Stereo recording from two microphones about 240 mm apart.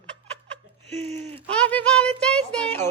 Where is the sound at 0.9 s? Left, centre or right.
Right.